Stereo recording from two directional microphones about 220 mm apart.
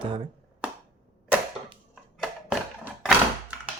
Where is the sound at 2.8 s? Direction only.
5° right (ahead or behind).